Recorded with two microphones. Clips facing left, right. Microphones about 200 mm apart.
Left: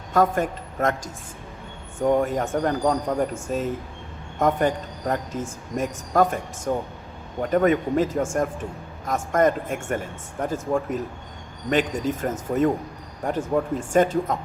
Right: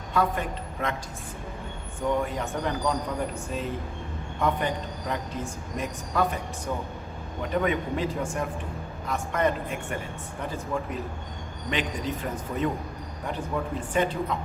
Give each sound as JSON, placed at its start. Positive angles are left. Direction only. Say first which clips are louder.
{"t": 0.1, "sound": "a woman's voice", "louder": "left 6 dB", "side_deg": 45}
{"t": 2.0, "sound": "speech", "louder": "left 6 dB", "side_deg": 50}